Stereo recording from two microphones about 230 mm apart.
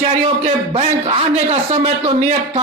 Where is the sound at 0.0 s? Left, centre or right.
Right.